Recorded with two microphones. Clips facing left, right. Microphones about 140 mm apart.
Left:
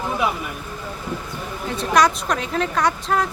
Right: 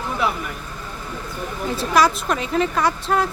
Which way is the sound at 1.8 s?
5° right (ahead or behind).